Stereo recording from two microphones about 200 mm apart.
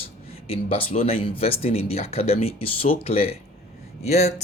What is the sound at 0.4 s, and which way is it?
Speech, 30° left (ahead or behind).